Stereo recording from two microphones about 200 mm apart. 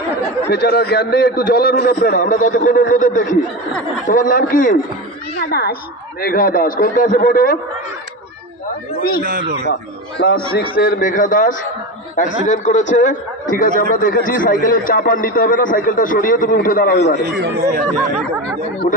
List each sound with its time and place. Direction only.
0.5 s a man's voice: 50° left (ahead or behind)
9.7 s a man's voice: 50° left (ahead or behind)
17.3 s speech: 50° right (ahead or behind)